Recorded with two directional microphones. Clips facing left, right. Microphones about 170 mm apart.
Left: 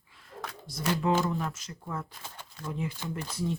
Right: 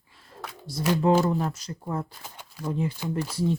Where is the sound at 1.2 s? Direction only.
35° right (ahead or behind).